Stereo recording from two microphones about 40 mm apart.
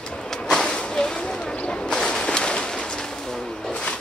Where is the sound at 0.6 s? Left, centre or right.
Centre.